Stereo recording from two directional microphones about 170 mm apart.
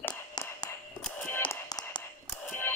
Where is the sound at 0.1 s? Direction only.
20° left (ahead or behind).